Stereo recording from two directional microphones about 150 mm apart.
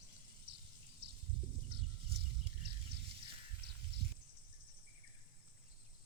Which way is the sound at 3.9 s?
90° right.